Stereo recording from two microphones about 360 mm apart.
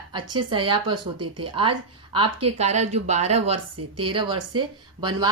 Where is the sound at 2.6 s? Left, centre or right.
Centre.